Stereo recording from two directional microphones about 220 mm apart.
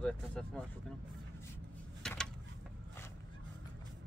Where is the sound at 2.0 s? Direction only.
5° left (ahead or behind).